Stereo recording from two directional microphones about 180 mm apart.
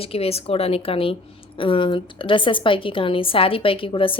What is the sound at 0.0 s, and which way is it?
A woman's voice, 35° left (ahead or behind).